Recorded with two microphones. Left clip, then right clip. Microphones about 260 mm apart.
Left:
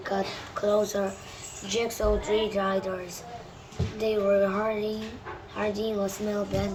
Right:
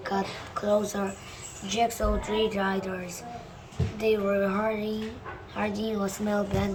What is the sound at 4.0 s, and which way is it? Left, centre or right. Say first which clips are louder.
Speech: left 2 dB; centre.